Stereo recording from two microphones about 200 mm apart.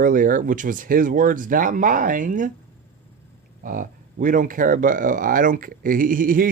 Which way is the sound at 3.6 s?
40° right (ahead or behind).